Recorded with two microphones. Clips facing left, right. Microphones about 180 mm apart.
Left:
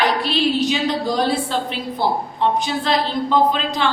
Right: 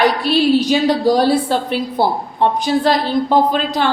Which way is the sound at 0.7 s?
45° right (ahead or behind).